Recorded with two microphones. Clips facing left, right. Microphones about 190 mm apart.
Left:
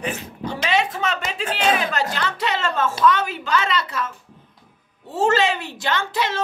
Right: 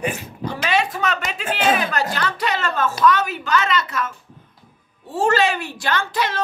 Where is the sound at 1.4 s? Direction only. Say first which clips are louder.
Right 1 dB; 5° right (ahead or behind).